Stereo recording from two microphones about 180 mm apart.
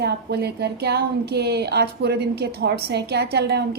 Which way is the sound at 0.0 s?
65° right (ahead or behind).